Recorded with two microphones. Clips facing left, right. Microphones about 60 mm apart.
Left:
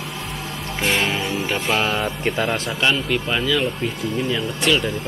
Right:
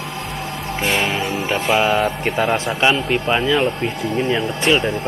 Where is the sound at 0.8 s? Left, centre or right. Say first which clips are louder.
Right 1 dB; centre.